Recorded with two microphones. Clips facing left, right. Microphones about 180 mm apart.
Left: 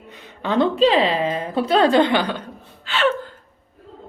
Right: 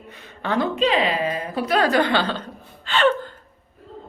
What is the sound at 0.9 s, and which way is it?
A woman's voice, 30° left (ahead or behind).